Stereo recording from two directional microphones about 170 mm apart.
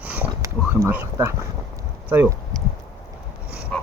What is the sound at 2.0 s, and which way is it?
Speech, 10° right (ahead or behind).